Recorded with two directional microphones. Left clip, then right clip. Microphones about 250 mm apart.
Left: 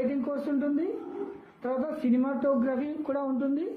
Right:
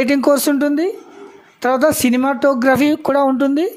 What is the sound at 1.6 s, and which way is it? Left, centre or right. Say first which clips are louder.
Speech: right 17 dB; right.